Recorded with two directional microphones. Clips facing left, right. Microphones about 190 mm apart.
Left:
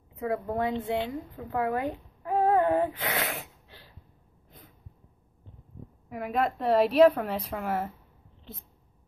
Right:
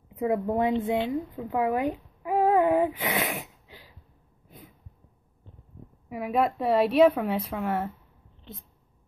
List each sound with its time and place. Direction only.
0.1 s a woman's voice: 20° right (ahead or behind)
6.0 s a woman's voice: 5° right (ahead or behind)